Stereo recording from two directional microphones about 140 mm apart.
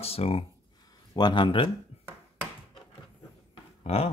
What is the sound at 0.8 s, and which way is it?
Speech, 30° left (ahead or behind).